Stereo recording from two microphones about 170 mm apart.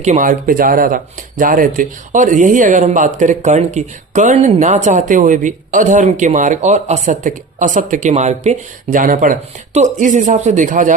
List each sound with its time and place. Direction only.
0.0 s speech: 50° right (ahead or behind)